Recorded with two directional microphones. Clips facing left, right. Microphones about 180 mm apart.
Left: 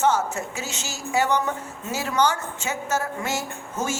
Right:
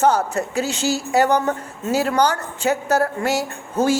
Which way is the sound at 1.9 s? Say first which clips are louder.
Right 5 dB; 65° right (ahead or behind).